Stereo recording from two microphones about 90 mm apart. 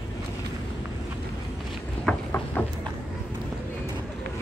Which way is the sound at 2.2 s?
15° left (ahead or behind).